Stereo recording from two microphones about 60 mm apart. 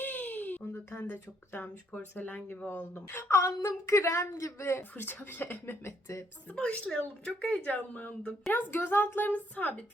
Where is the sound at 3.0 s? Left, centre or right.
Left.